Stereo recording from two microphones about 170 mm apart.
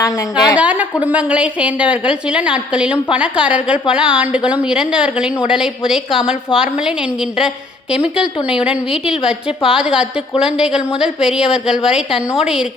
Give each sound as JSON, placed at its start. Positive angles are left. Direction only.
{"t": 0.0, "sound": "a woman's voice", "side_deg": 25}
{"t": 0.5, "sound": "a woman's voice", "side_deg": -10}